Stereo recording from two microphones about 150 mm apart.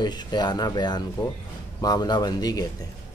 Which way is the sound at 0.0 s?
30° left (ahead or behind).